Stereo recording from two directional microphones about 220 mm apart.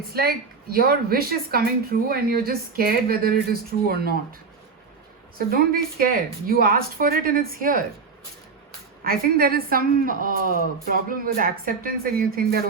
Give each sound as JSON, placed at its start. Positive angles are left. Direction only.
{"t": 0.1, "sound": "speech", "side_deg": -45}
{"t": 5.5, "sound": "speech", "side_deg": -40}
{"t": 9.0, "sound": "speech", "side_deg": -40}